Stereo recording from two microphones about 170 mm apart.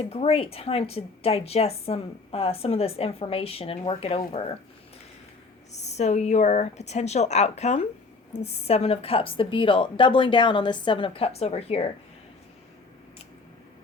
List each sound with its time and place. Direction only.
0.0 s a woman's voice: 35° left (ahead or behind)
5.9 s a woman's voice: 40° left (ahead or behind)